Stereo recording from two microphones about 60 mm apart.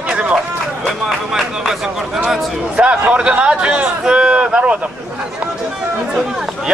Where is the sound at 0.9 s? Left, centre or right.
Centre.